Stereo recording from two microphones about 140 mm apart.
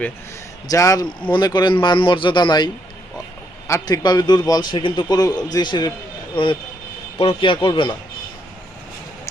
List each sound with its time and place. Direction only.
0.7 s a man's voice: 25° left (ahead or behind)
3.7 s a man's voice: 25° left (ahead or behind)